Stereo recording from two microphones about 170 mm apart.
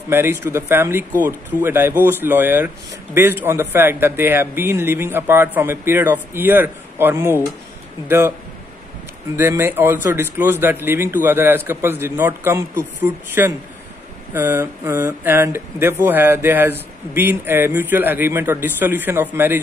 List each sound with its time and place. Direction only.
0.1 s speech: 15° right (ahead or behind)
9.4 s speech: 15° right (ahead or behind)